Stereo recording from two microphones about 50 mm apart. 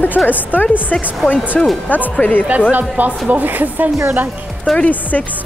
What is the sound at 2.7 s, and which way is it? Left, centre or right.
Speech, right.